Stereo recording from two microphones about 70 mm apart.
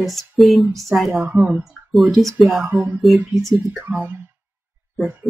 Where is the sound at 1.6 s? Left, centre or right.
Centre.